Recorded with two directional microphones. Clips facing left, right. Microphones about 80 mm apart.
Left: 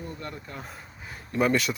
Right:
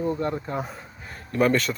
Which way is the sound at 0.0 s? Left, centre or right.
Right.